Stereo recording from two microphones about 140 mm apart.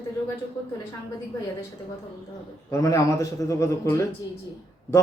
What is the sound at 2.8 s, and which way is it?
A man's voice, 25° left (ahead or behind).